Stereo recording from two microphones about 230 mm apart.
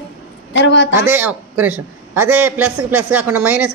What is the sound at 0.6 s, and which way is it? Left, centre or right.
Speech, left.